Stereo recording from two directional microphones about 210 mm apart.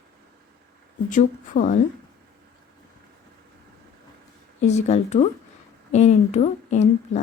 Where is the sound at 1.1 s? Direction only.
40° left (ahead or behind).